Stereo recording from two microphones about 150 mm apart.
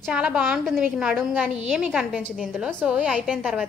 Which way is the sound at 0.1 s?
5° right (ahead or behind).